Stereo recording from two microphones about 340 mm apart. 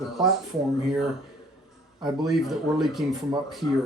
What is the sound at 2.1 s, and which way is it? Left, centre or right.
Speech, centre.